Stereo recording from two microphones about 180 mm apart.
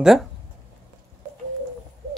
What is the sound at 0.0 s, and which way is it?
Speech, centre (ahead or behind).